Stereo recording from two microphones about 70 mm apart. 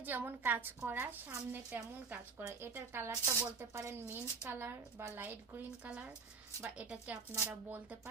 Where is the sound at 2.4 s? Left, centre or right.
Right.